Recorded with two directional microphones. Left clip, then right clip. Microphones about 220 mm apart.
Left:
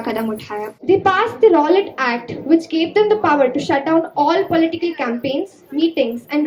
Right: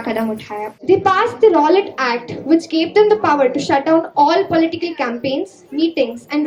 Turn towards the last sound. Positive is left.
turn(degrees=-15)  # may be behind; listen again after turning